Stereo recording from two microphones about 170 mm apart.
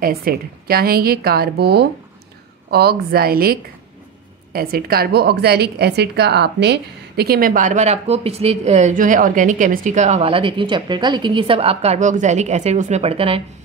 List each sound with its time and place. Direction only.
0.0 s a woman's voice: 60° right (ahead or behind); by 13.4 s 35° right (ahead or behind)